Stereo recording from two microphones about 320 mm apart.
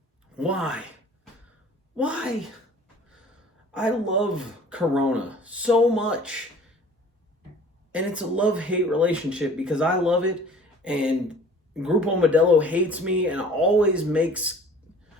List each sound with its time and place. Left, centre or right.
0.3 s speech: centre
2.0 s speech: centre
3.7 s speech: centre
7.9 s speech: centre